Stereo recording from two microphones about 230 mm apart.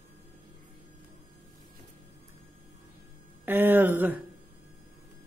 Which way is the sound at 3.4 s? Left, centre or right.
Centre.